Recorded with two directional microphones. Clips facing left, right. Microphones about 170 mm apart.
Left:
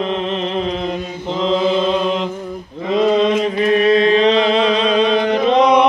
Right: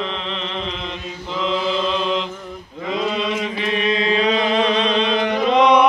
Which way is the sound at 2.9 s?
45° left (ahead or behind).